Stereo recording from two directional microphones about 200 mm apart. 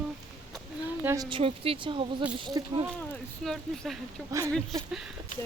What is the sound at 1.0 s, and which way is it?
A woman's voice, 15° right (ahead or behind).